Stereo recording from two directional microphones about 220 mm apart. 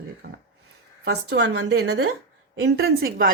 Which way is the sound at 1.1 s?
50° right (ahead or behind).